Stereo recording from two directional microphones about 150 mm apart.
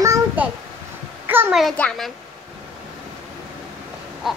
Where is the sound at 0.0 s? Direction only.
20° right (ahead or behind).